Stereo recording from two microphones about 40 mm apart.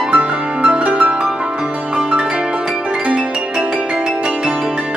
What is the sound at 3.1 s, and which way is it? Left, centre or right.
Music, right.